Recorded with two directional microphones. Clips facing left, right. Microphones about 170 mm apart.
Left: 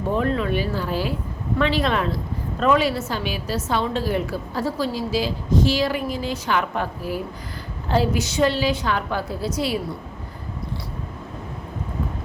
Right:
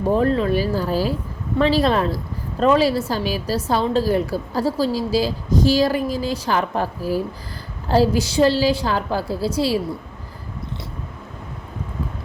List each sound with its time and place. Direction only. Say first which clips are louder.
0.1 s a woman's voice: right 4 dB; 35° right (ahead or behind)